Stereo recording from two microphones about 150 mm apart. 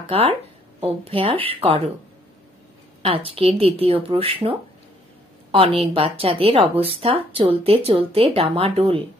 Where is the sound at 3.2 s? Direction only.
40° right (ahead or behind).